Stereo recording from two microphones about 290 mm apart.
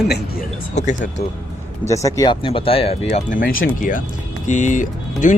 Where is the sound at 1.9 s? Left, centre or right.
Centre.